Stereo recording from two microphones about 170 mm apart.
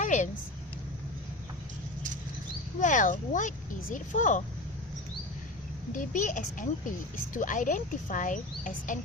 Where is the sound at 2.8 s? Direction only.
50° left (ahead or behind).